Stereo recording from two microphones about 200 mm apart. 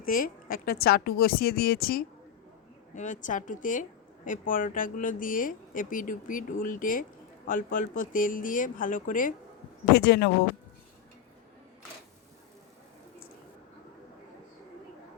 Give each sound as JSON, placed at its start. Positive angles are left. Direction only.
{"t": 0.1, "sound": "a woman's voice", "side_deg": 45}
{"t": 9.9, "sound": "speech", "side_deg": 50}